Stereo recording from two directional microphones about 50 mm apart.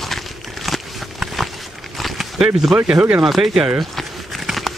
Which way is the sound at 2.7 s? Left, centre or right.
Right.